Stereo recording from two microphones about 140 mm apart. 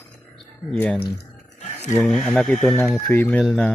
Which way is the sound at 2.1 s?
5° left (ahead or behind).